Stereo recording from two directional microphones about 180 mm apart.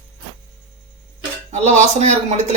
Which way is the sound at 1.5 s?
40° right (ahead or behind).